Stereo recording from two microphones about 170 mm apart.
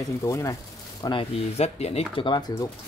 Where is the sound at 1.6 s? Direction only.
40° left (ahead or behind).